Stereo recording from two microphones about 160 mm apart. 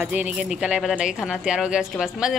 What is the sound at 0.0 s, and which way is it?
Speech, 10° right (ahead or behind).